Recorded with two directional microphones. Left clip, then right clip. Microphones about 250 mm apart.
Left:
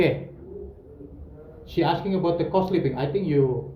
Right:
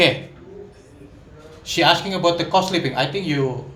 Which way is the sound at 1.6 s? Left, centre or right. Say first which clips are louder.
Right 7 dB; right.